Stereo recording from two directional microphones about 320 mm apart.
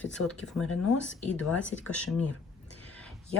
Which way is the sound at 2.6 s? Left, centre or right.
Left.